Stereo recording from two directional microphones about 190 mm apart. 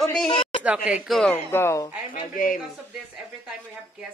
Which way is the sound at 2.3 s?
45° left (ahead or behind).